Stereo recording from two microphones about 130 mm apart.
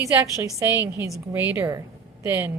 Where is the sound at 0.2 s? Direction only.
20° right (ahead or behind).